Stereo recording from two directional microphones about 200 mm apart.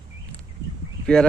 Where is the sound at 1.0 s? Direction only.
5° left (ahead or behind).